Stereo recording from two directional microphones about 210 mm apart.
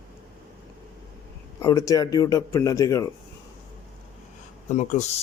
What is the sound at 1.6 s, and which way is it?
Speech, 15° left (ahead or behind).